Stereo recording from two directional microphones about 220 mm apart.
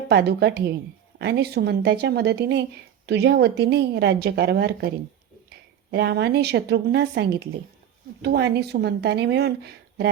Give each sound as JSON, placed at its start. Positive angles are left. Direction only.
{"t": 0.1, "sound": "a woman's voice", "side_deg": -50}
{"t": 5.9, "sound": "a woman's voice", "side_deg": -50}